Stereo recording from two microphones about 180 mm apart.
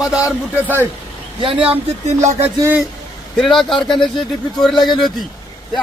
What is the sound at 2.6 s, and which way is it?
Speech, 10° right (ahead or behind).